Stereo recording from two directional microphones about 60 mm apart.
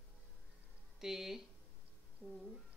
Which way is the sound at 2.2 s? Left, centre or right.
Left.